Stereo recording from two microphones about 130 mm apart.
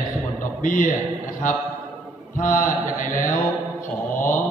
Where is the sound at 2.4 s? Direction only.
90° left.